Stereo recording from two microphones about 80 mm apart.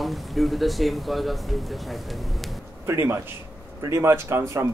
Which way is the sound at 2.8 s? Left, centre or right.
Right.